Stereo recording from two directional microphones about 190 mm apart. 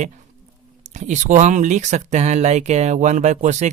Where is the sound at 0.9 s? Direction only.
40° right (ahead or behind).